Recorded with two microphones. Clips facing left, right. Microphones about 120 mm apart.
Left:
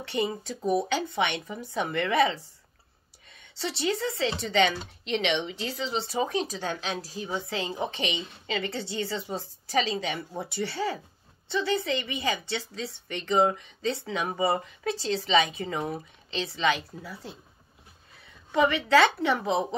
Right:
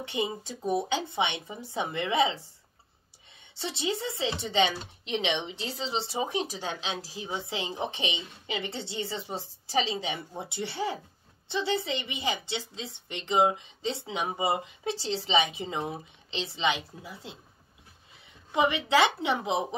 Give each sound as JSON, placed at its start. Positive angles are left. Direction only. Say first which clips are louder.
{"t": 0.0, "sound": "speech", "louder": "left 2 dB", "side_deg": -15}
{"t": 18.5, "sound": "speech", "louder": "left 3 dB", "side_deg": -20}